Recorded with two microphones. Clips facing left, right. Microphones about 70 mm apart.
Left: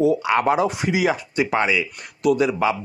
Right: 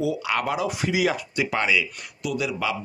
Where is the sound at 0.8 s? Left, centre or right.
Left.